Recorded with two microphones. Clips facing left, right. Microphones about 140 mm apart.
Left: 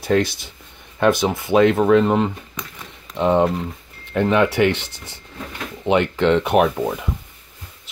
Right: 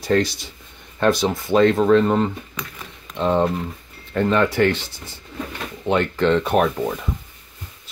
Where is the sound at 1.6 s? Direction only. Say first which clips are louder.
Left 1 dB; 10° left (ahead or behind).